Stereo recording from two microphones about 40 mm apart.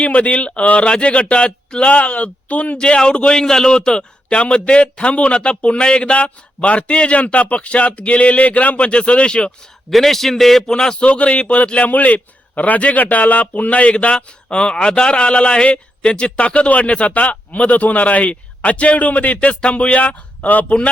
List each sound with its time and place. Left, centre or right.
0.0 s a man's voice: left
2.8 s a man's voice: left
3.4 s a man's voice: centre
9.9 s a man's voice: centre
10.7 s a man's voice: centre
11.0 s speech: left
11.9 s a man's voice: left